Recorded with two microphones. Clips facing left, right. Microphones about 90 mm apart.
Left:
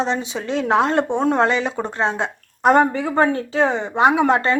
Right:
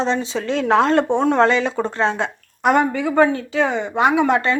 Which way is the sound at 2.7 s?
35° left (ahead or behind).